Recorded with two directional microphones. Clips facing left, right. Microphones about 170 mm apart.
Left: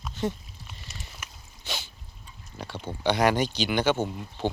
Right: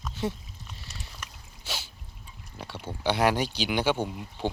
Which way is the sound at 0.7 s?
5° left (ahead or behind).